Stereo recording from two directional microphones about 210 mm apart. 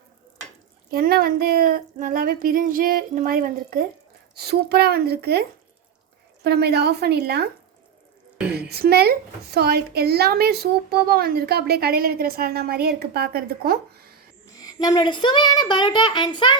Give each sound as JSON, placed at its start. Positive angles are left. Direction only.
{"t": 0.9, "sound": "a woman's voice", "side_deg": -45}
{"t": 8.7, "sound": "a woman's voice", "side_deg": -50}
{"t": 14.6, "sound": "a child's voice", "side_deg": 20}